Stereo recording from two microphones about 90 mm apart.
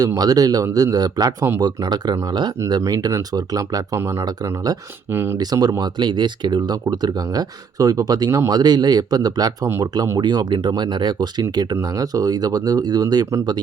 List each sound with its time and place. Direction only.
0.2 s speech: 45° right (ahead or behind)
3.9 s speech: 30° right (ahead or behind)
4.4 s speech: 45° right (ahead or behind)
5.1 s speech: 25° right (ahead or behind)
5.4 s speech: 45° right (ahead or behind)